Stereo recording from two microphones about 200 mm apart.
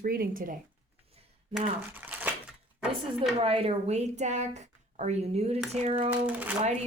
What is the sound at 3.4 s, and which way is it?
A woman's voice, 30° right (ahead or behind).